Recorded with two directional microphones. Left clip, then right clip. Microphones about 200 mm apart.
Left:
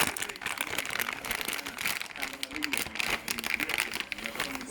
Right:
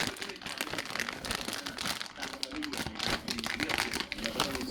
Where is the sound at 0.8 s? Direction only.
5° left (ahead or behind).